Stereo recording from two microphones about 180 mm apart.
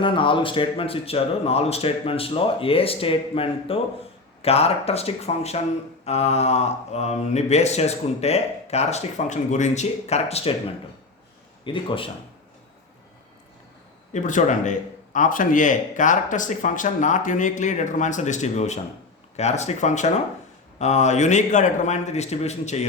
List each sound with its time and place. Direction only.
0.0 s speech: 30° left (ahead or behind)
11.6 s speech: 30° left (ahead or behind)
14.1 s a man's voice: 45° left (ahead or behind)